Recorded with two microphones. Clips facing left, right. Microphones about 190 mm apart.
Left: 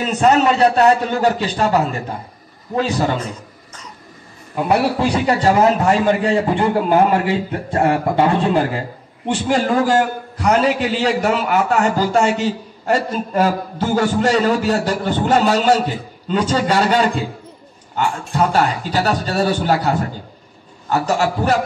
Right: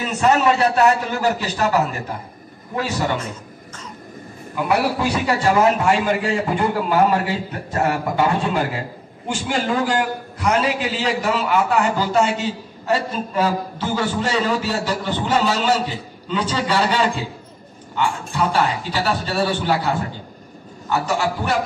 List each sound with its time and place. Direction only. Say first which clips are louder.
0.0 s a man's voice: left 3 dB; 35° left (ahead or behind)
4.6 s a man's voice: left 3 dB; 30° left (ahead or behind)
9.3 s a man's voice: left 5 dB; 40° left (ahead or behind)
21.1 s a man's voice: left 6 dB; 40° left (ahead or behind)